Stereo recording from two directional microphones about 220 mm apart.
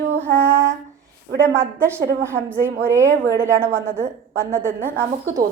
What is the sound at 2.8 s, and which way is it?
A woman's voice, 10° right (ahead or behind).